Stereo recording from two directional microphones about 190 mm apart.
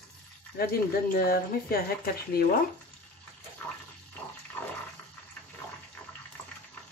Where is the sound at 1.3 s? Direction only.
50° left (ahead or behind).